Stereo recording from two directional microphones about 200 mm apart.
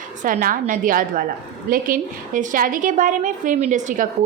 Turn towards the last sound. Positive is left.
turn(degrees=-35)  # may be behind; listen again after turning